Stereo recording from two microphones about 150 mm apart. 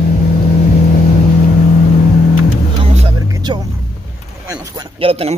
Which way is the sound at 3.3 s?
20° right (ahead or behind).